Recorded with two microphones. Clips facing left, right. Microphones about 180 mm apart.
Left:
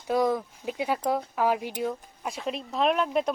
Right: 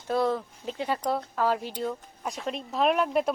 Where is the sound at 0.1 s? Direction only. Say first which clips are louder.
Left 1 dB; 10° left (ahead or behind).